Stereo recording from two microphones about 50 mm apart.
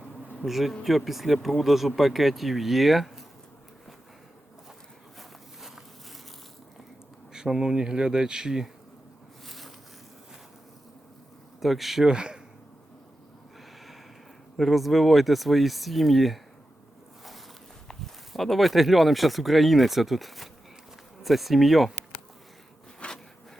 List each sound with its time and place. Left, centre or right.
0.4 s speech: centre
7.3 s speech: centre
9.5 s a sound: centre
11.6 s speech: centre
12.0 s speech: centre
14.5 s speech: centre
17.8 s speech: centre
23.0 s a sound: centre